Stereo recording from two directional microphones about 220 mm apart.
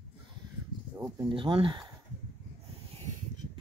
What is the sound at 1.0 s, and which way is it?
Speech, 20° right (ahead or behind).